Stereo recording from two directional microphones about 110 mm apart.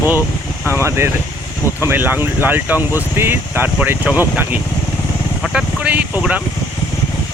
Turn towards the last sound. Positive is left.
turn(degrees=-10)  # may be behind; listen again after turning